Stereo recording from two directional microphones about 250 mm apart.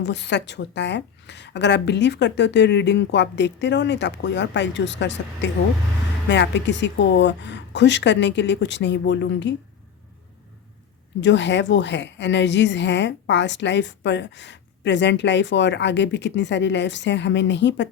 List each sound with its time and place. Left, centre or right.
0.0 s speech: left
11.2 s speech: left